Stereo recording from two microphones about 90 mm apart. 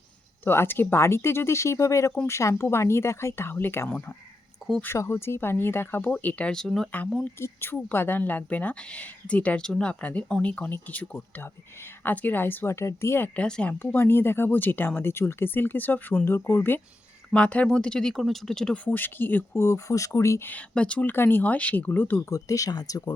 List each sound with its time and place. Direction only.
0.4 s speech: 25° left (ahead or behind)
4.9 s speech: 30° left (ahead or behind)
6.2 s a woman's voice: 10° left (ahead or behind)
7.3 s a woman's voice: 25° left (ahead or behind)
13.7 s speech: 25° left (ahead or behind)
17.3 s a woman's voice: 15° left (ahead or behind)
18.9 s speech: 20° left (ahead or behind)
20.5 s speech: 15° left (ahead or behind)
22.3 s speech: 40° left (ahead or behind)